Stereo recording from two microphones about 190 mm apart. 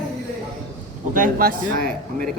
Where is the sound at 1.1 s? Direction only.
45° right (ahead or behind).